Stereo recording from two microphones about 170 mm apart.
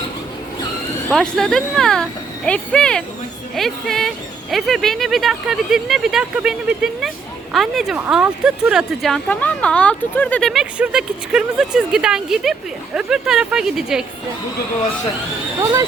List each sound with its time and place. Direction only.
1.1 s speech: 5° left (ahead or behind)
10.5 s speech: 5° right (ahead or behind)
15.6 s speech: 20° right (ahead or behind)